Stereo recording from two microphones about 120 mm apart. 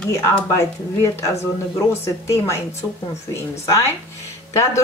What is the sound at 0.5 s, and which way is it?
Speech, 25° left (ahead or behind).